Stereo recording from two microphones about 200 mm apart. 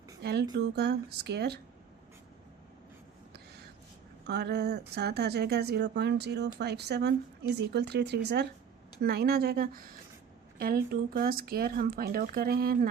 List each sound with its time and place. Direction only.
0.2 s speech: 55° right (ahead or behind)
3.3 s a sound: 55° right (ahead or behind)
4.3 s speech: 55° right (ahead or behind)